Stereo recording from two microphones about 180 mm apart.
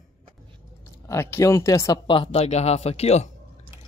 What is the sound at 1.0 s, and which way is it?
Speech, 15° left (ahead or behind).